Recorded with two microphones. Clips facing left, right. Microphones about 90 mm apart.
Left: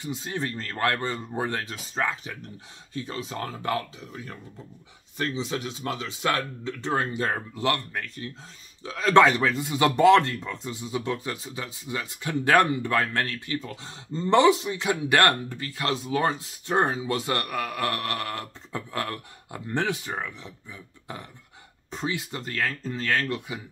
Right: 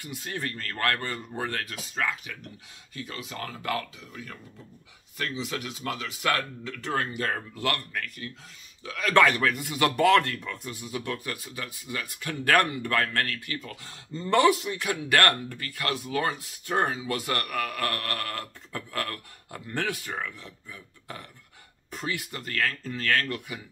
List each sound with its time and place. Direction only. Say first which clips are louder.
0.0 s speech: left 3 dB; 20° left (ahead or behind)